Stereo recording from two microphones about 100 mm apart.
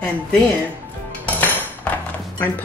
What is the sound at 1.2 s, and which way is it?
Music, 15° left (ahead or behind).